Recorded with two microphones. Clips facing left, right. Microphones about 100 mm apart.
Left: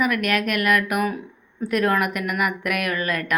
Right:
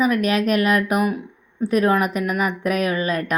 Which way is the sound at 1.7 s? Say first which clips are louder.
Right 3 dB; 15° right (ahead or behind).